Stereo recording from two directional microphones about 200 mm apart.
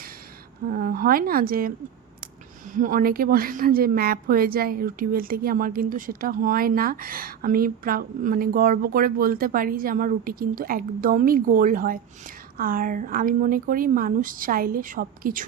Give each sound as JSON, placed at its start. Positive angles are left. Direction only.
{"t": 0.7, "sound": "a woman's voice", "side_deg": -45}
{"t": 2.7, "sound": "a woman's voice", "side_deg": -40}